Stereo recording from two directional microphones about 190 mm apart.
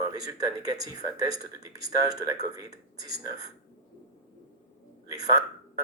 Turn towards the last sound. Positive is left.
turn(degrees=-20)  # may be behind; listen again after turning